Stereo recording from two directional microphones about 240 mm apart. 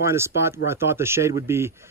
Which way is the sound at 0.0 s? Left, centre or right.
Centre.